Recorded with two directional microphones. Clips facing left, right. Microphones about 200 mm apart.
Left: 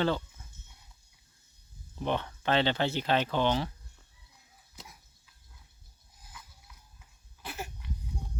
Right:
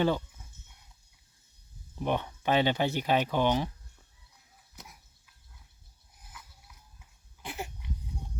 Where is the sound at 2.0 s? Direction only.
10° right (ahead or behind).